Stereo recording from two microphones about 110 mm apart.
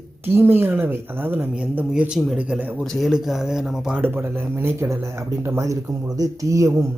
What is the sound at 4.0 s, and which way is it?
Speech, 20° right (ahead or behind).